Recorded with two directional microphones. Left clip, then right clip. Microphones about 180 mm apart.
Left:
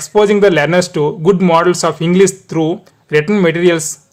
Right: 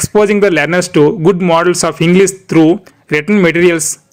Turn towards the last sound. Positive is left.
turn(degrees=-15)  # may be behind; listen again after turning